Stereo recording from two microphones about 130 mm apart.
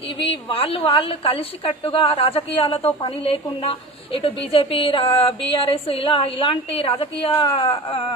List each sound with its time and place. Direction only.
0.2 s a woman's voice: 45° left (ahead or behind)